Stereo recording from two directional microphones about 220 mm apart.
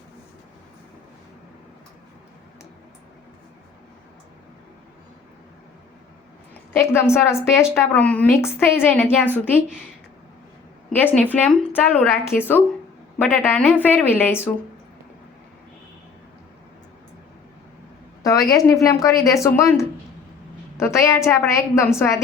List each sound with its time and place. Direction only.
6.5 s a woman's voice: 10° left (ahead or behind)
10.8 s a woman's voice: 5° left (ahead or behind)
18.2 s a woman's voice: 15° left (ahead or behind)